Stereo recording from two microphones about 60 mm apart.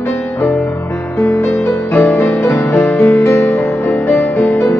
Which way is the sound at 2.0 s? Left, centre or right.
Left.